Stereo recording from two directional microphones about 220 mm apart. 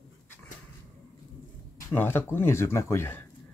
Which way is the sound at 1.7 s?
10° left (ahead or behind).